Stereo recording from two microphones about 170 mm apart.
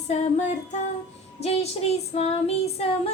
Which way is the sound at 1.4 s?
40° left (ahead or behind).